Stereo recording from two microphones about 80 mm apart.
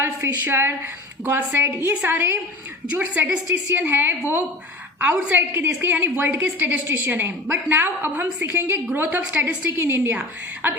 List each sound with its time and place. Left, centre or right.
0.0 s a woman's voice: right